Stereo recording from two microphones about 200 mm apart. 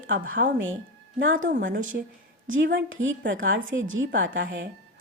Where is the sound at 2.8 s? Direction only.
75° right (ahead or behind).